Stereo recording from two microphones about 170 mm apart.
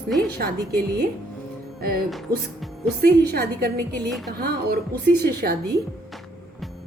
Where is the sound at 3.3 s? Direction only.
65° right (ahead or behind).